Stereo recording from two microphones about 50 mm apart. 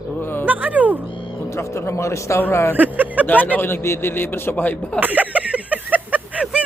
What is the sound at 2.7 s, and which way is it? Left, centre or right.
Speech, right.